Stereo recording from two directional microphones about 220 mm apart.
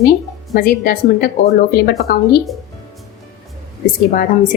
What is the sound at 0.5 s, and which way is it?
Speech, 45° left (ahead or behind).